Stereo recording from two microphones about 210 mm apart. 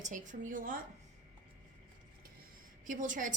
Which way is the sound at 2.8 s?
40° right (ahead or behind).